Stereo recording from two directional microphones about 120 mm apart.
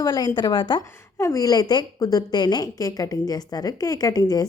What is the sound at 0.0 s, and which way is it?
Speech, 30° left (ahead or behind).